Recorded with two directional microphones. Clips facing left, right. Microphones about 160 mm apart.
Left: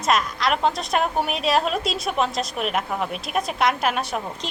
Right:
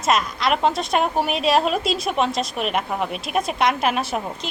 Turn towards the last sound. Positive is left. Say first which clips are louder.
# right 2 dB
turn(degrees=-5)  # may be behind; listen again after turning